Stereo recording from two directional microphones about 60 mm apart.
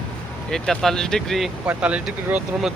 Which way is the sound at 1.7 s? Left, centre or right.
Right.